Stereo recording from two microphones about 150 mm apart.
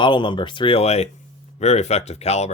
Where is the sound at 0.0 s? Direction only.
30° left (ahead or behind).